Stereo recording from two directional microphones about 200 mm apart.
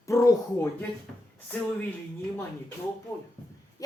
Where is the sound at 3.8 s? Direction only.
15° left (ahead or behind).